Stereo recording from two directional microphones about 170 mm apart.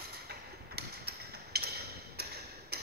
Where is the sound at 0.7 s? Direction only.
70° right (ahead or behind).